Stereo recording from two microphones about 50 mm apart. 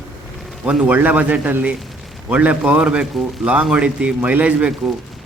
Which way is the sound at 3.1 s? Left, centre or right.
Centre.